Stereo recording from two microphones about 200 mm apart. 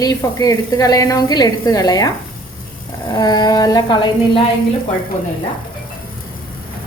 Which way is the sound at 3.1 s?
20° left (ahead or behind).